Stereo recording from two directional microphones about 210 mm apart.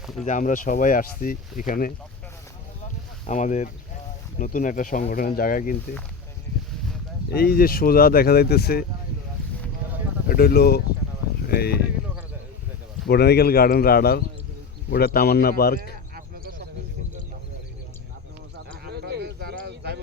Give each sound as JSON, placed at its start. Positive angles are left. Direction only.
{"t": 0.3, "sound": "speech", "side_deg": 35}
{"t": 3.2, "sound": "speech", "side_deg": 35}
{"t": 7.3, "sound": "speech", "side_deg": 45}
{"t": 10.2, "sound": "speech", "side_deg": 50}
{"t": 13.1, "sound": "speech", "side_deg": 50}
{"t": 16.1, "sound": "cricket", "side_deg": -45}
{"t": 18.9, "sound": "a sound", "side_deg": -50}